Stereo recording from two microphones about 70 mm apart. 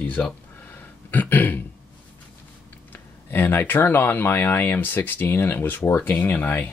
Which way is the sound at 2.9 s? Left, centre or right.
Left.